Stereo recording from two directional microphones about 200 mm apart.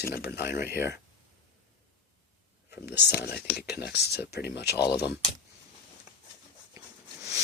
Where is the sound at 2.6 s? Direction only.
55° left (ahead or behind).